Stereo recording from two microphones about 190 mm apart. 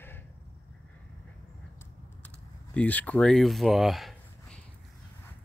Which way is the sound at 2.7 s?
10° left (ahead or behind).